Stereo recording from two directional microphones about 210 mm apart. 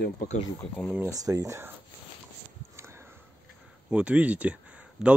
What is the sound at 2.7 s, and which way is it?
Sniff, 10° right (ahead or behind).